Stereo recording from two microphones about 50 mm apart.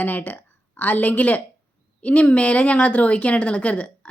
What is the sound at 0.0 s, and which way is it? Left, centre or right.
A woman's voice, left.